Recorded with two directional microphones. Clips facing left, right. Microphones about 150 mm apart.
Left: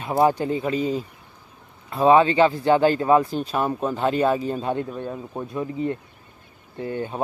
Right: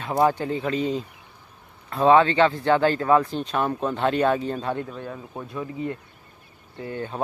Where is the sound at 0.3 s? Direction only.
15° left (ahead or behind).